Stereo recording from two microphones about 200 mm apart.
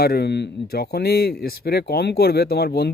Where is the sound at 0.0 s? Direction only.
50° left (ahead or behind).